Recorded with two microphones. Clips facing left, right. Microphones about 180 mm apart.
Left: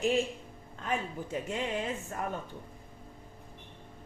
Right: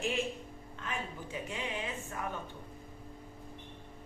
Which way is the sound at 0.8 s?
45° left (ahead or behind).